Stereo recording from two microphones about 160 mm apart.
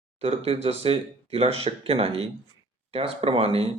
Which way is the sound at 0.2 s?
40° right (ahead or behind).